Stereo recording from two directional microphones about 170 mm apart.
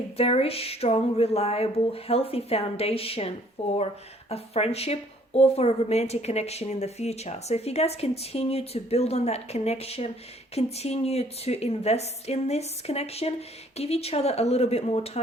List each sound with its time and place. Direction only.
0.2 s a woman's voice: 35° left (ahead or behind)